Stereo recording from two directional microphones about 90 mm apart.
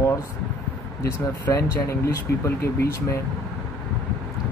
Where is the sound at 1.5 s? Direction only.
35° left (ahead or behind).